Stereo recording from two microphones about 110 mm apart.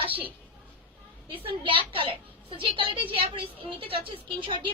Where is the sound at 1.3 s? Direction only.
55° right (ahead or behind).